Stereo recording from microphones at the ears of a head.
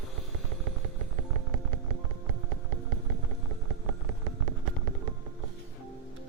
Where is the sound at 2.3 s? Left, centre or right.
Right.